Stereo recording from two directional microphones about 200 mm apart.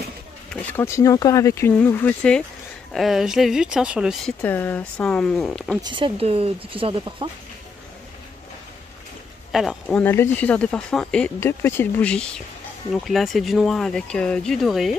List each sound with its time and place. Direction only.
0.5 s speech: 5° left (ahead or behind)
5.8 s speech: 25° right (ahead or behind)
9.5 s speech: centre (ahead or behind)